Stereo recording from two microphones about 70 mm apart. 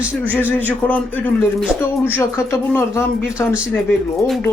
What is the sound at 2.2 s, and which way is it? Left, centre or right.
Speech, left.